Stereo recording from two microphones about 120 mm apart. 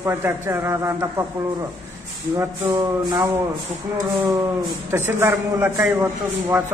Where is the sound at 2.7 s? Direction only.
30° right (ahead or behind).